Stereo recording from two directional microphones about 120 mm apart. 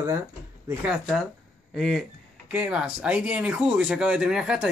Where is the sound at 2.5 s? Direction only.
10° right (ahead or behind).